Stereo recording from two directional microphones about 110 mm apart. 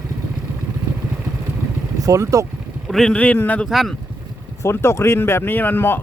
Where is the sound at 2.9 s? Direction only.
5° left (ahead or behind).